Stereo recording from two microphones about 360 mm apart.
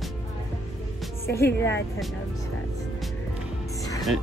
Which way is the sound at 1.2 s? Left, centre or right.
Centre.